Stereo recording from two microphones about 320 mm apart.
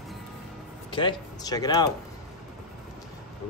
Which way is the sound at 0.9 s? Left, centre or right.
Centre.